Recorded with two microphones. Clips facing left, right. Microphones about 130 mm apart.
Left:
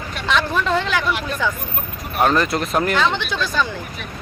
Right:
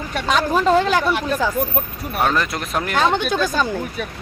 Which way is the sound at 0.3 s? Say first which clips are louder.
Right 3 dB; 40° right (ahead or behind).